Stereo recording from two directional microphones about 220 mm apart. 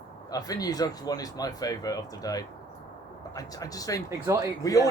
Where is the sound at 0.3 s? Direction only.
15° left (ahead or behind).